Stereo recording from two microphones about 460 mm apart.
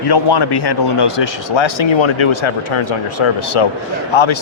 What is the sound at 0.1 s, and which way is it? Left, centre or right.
Speech, left.